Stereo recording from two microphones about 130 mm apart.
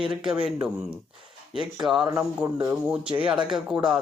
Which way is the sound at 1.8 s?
5° right (ahead or behind).